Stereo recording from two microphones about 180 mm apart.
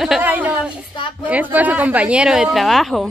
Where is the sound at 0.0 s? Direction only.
5° right (ahead or behind).